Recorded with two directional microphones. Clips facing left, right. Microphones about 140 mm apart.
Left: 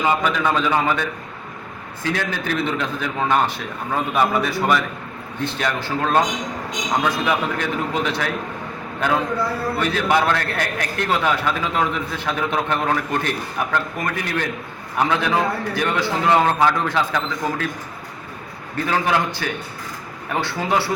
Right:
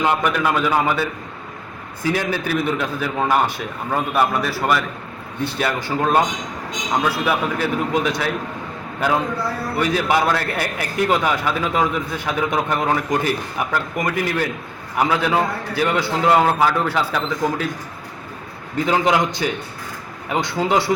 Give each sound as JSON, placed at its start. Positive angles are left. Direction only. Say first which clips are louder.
{"t": 0.4, "sound": "a man's voice", "louder": "even", "side_deg": -5}
{"t": 18.9, "sound": "a man's voice", "louder": "right 3 dB", "side_deg": -15}